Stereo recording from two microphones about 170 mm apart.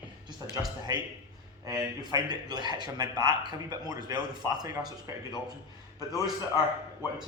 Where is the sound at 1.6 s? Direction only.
20° right (ahead or behind).